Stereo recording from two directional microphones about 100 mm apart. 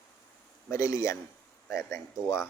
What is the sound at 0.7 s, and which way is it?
Speech, 30° left (ahead or behind).